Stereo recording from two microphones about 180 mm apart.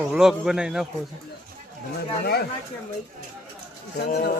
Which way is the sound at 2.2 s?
60° left (ahead or behind).